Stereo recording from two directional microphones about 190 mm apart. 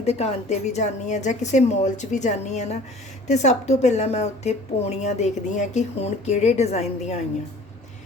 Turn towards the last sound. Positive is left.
turn(degrees=35)  # may be behind; listen again after turning